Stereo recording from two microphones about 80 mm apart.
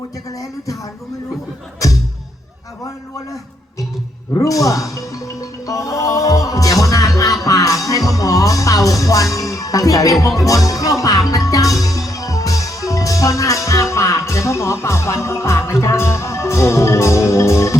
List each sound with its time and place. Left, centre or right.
4.4 s music: left